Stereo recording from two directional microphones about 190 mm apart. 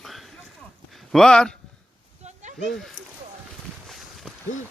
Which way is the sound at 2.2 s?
40° right (ahead or behind).